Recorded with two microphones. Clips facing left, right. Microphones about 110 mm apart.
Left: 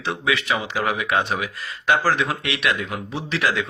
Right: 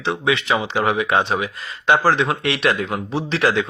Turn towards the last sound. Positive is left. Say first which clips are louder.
# right 4 dB
turn(degrees=-30)  # may be behind; listen again after turning